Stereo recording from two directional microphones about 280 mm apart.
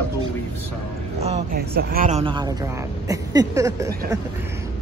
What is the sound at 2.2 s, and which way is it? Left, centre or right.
Speech, centre.